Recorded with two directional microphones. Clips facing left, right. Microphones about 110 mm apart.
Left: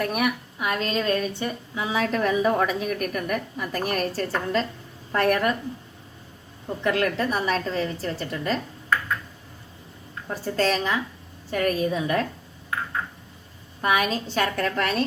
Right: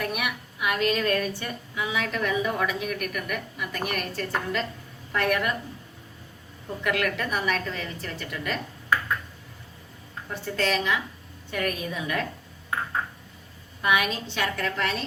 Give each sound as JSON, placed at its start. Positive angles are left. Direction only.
{"t": 0.0, "sound": "a woman's voice", "side_deg": 40}
{"t": 6.8, "sound": "a woman's voice", "side_deg": 30}
{"t": 10.2, "sound": "a woman's voice", "side_deg": 35}
{"t": 13.8, "sound": "a woman's voice", "side_deg": 40}